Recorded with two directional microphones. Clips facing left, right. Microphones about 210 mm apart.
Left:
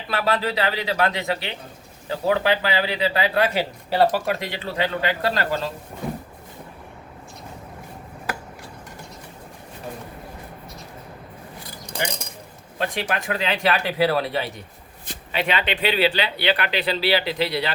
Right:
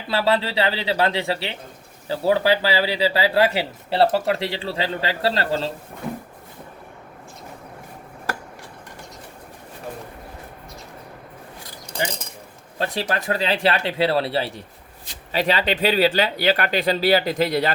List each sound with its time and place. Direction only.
0.1 s a man's voice: 30° right (ahead or behind)
12.8 s speech: 35° right (ahead or behind)